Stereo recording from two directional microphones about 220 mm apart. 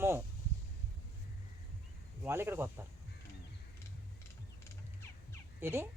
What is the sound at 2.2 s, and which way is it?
Speech, 10° right (ahead or behind).